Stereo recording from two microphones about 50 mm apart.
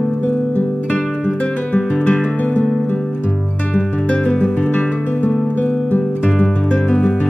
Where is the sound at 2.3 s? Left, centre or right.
Left.